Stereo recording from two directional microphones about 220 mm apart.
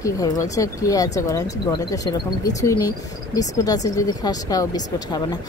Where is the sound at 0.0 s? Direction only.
15° left (ahead or behind).